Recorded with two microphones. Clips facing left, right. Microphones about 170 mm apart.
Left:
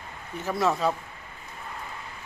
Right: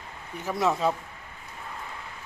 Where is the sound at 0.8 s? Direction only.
20° right (ahead or behind).